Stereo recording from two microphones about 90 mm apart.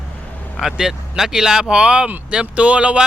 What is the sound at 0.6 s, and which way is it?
Speech, 5° right (ahead or behind).